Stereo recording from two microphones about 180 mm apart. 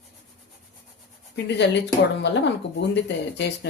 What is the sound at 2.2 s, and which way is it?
Speech, 75° left (ahead or behind).